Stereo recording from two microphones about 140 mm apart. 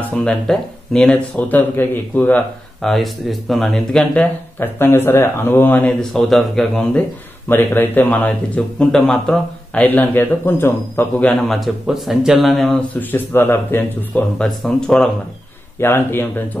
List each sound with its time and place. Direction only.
0.0 s speech: 10° left (ahead or behind)
7.4 s speech: 15° left (ahead or behind)
9.8 s a man's voice: 15° left (ahead or behind)
13.0 s speech: 15° left (ahead or behind)
14.6 s a man's voice: 5° left (ahead or behind)
15.8 s speech: 15° left (ahead or behind)